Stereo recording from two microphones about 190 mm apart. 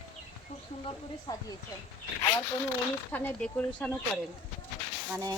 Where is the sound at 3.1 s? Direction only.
5° left (ahead or behind).